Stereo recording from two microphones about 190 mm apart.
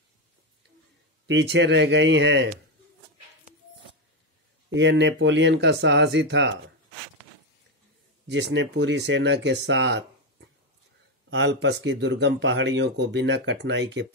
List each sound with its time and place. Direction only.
1.2 s speech: 65° right (ahead or behind)
4.7 s speech: 70° right (ahead or behind)
8.3 s speech: 70° right (ahead or behind)
11.2 s speech: 70° right (ahead or behind)